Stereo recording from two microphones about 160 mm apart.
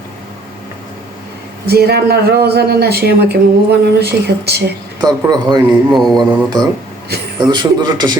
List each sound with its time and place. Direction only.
1.6 s a man's voice: 80° right
4.9 s a man's voice: 25° right (ahead or behind)
5.9 s mantra: centre (ahead or behind)
6.1 s a man's voice: 25° right (ahead or behind)